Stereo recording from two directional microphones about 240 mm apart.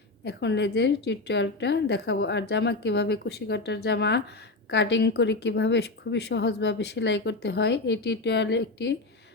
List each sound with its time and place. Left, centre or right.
0.3 s speech: left